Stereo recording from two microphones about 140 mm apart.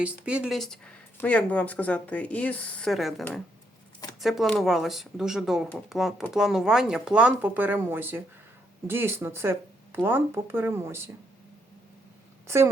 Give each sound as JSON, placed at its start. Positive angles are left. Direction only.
{"t": 0.0, "sound": "speech", "side_deg": -10}
{"t": 12.5, "sound": "a woman's voice", "side_deg": -20}